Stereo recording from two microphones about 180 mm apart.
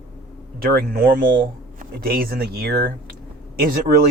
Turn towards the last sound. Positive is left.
turn(degrees=-50)  # may be behind; listen again after turning